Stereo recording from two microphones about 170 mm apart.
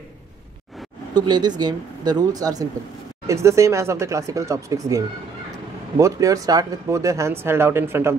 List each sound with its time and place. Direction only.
1.1 s speech: 25° right (ahead or behind)
5.9 s speech: 20° right (ahead or behind)